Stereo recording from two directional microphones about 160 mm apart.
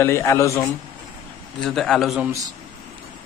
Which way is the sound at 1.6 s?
Centre (ahead or behind).